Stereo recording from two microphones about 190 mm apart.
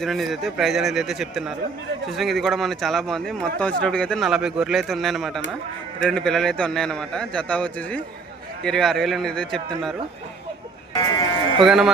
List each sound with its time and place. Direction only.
0.0 s a man's voice: centre (ahead or behind)
10.9 s speech: 20° left (ahead or behind)
11.6 s a man's voice: centre (ahead or behind)